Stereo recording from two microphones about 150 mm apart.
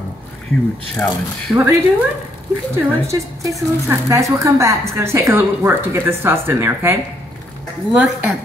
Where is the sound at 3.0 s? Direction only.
20° right (ahead or behind).